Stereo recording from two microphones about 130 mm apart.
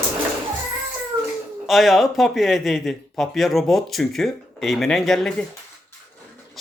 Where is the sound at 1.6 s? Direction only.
Centre (ahead or behind).